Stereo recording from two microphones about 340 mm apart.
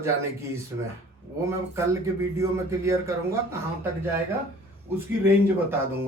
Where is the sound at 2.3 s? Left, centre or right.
Centre.